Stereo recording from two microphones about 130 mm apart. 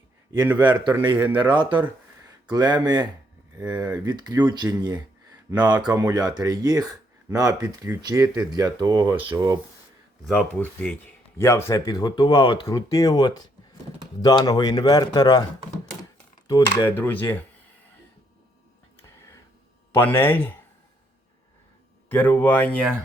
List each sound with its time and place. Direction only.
0.5 s speech: 35° right (ahead or behind)
10.2 s speech: 10° left (ahead or behind)
11.3 s speech: 20° left (ahead or behind)
16.5 s speech: 30° left (ahead or behind)
16.9 s speech: 15° left (ahead or behind)
19.9 s speech: 15° left (ahead or behind)
22.1 s speech: 15° left (ahead or behind)